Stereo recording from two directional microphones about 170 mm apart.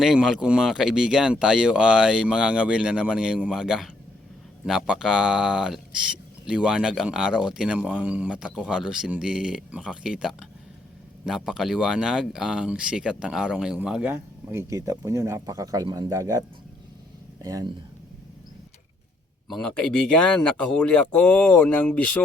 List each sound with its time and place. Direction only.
0.0 s speech: 5° right (ahead or behind); by 16.4 s 20° right (ahead or behind)
17.4 s speech: 20° right (ahead or behind)
19.5 s speech: 5° left (ahead or behind)